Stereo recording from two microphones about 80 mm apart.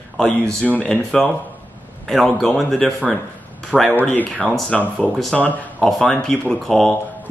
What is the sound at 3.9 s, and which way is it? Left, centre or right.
Speech, left.